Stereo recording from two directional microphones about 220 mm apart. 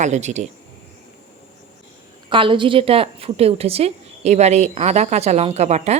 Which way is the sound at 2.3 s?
25° right (ahead or behind).